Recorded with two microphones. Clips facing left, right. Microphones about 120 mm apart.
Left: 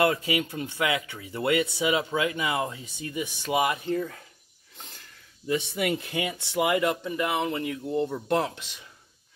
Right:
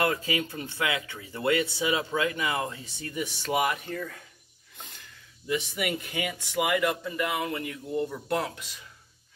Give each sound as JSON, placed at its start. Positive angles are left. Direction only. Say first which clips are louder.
{"t": 0.4, "sound": "speech", "louder": "left 3 dB", "side_deg": 20}
{"t": 5.5, "sound": "speech", "louder": "left 3 dB", "side_deg": 30}